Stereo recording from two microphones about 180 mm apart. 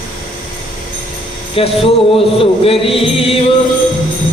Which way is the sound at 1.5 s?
30° left (ahead or behind).